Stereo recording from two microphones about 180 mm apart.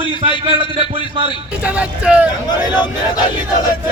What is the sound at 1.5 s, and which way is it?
Speech, 5° right (ahead or behind).